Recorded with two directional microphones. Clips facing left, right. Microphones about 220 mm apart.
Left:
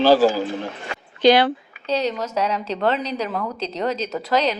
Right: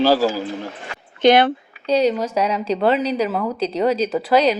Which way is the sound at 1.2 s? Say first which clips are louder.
Right 1 dB; 20° right (ahead or behind).